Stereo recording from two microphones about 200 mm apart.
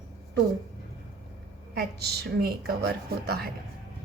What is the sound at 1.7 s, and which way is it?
A woman's voice, 50° right (ahead or behind).